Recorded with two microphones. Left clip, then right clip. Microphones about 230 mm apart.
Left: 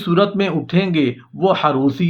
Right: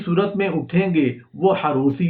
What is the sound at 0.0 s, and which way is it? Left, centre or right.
Speech, left.